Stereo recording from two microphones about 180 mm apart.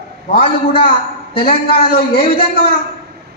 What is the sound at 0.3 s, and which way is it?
A man's voice, 30° left (ahead or behind).